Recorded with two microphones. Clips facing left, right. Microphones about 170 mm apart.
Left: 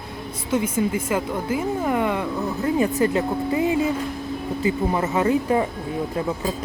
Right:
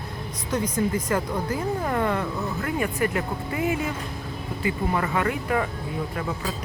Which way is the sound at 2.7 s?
25° left (ahead or behind).